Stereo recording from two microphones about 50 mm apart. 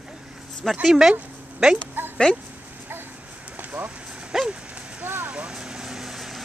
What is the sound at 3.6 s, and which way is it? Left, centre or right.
Vehicle, right.